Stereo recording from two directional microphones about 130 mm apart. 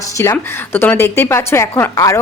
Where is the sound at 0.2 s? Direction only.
20° left (ahead or behind).